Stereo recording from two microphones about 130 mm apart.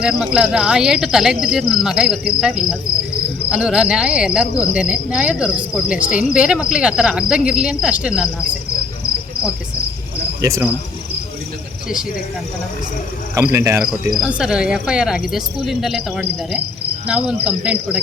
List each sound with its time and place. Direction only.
0.0 s speech: 5° right (ahead or behind)
6.0 s cricket: 90° left
6.3 s speech: 5° right (ahead or behind)
10.4 s speech: 25° right (ahead or behind)
13.3 s speech: 20° right (ahead or behind)
14.2 s speech: 5° right (ahead or behind)